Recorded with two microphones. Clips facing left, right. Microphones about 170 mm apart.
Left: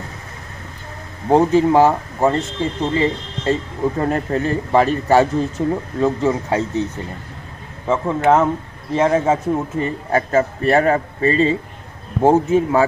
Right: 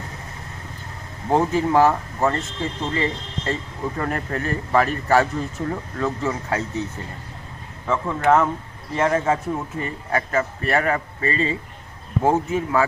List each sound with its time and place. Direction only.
1.3 s speech: 20° left (ahead or behind)
7.9 s a man's voice: 20° left (ahead or behind)